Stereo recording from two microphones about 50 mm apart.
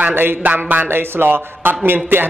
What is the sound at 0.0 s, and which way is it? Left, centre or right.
A man's voice, right.